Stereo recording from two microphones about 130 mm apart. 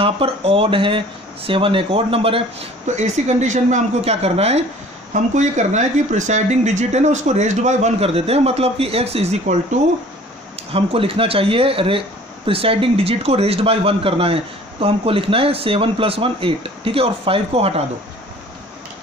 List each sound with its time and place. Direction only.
0.0 s speech: 45° right (ahead or behind)
3.0 s speech: 65° right (ahead or behind)
5.1 s speech: 70° right (ahead or behind)
10.7 s speech: 45° right (ahead or behind)